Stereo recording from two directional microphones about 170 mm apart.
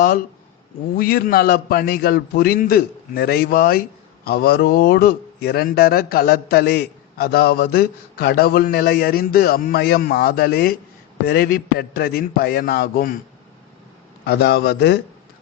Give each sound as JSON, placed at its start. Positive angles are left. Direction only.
{"t": 0.9, "sound": "a man's voice", "side_deg": 60}
{"t": 14.3, "sound": "a man's voice", "side_deg": 70}